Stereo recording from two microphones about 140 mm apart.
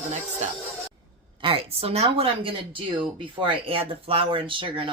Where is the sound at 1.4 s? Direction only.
45° right (ahead or behind).